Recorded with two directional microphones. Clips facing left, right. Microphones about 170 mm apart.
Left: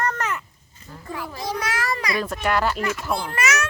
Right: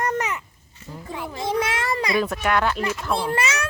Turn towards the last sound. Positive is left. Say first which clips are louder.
# even
turn(degrees=-30)  # may be behind; listen again after turning